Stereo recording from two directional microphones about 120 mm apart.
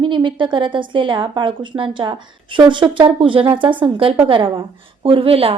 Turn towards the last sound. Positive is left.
turn(degrees=-55)  # may be behind; listen again after turning